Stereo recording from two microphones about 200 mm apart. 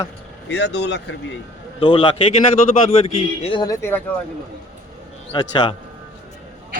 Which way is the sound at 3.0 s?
25° left (ahead or behind).